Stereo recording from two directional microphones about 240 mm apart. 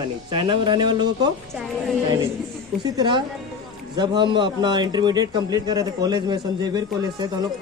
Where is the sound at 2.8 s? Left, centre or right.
Centre.